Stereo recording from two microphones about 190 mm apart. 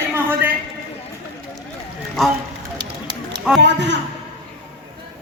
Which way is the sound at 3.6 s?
65° right (ahead or behind).